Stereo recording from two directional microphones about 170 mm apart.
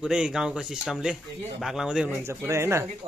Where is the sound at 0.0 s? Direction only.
5° right (ahead or behind).